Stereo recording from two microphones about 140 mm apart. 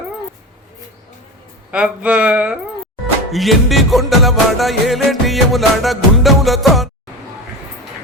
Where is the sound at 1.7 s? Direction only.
10° right (ahead or behind).